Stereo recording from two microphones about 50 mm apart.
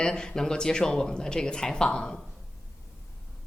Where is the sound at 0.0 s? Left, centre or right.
Centre.